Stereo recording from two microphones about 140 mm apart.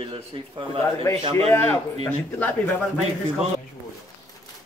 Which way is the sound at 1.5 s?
15° left (ahead or behind).